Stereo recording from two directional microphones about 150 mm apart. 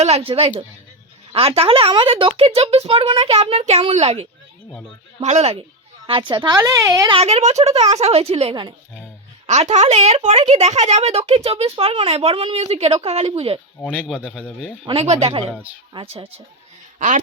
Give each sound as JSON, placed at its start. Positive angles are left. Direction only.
{"t": 0.0, "sound": "a woman's voice", "side_deg": -40}
{"t": 7.1, "sound": "a woman's voice", "side_deg": -45}
{"t": 14.0, "sound": "speech", "side_deg": -5}
{"t": 14.8, "sound": "speech", "side_deg": -45}